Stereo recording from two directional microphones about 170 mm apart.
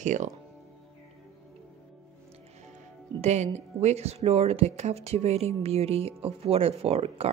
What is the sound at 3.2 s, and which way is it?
A woman's voice, 40° right (ahead or behind).